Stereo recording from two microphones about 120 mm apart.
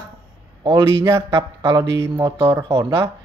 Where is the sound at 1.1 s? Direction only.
25° right (ahead or behind).